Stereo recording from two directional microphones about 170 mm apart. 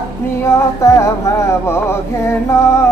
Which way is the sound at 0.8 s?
15° left (ahead or behind).